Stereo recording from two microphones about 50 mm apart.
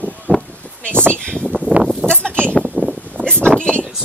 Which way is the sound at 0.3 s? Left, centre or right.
Right.